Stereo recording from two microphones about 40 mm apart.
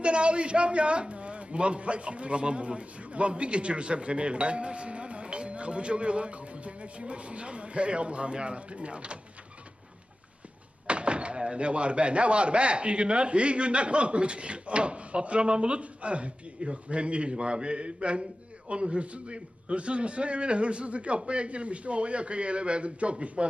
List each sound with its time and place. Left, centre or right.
0.0 s a man's voice: right
10.8 s a man's voice: right